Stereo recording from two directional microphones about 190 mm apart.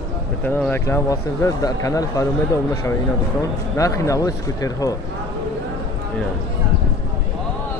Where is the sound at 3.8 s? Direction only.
15° left (ahead or behind).